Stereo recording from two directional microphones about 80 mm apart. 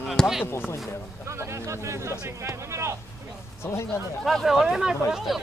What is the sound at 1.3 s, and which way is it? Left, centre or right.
Speech, right.